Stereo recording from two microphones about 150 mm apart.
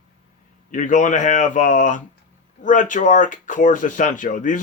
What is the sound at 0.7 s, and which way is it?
Speech, 60° left (ahead or behind).